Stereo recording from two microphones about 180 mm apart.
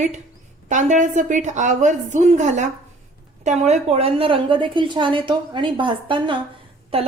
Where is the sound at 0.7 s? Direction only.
45° right (ahead or behind).